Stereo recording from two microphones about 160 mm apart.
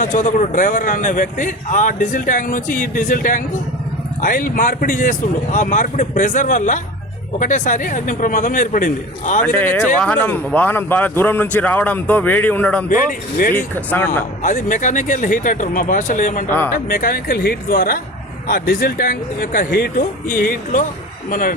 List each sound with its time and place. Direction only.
0.0 s a man's voice: 50° left (ahead or behind)
9.4 s speech: 10° left (ahead or behind)
14.4 s speech: 50° left (ahead or behind)
16.5 s speech: 10° left (ahead or behind)
16.9 s a man's voice: 60° left (ahead or behind)